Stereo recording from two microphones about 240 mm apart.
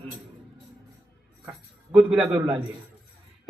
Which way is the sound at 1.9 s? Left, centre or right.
Centre.